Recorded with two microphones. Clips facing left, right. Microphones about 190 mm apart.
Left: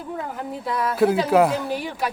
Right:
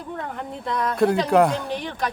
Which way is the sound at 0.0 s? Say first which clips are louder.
Left 1 dB; 5° left (ahead or behind).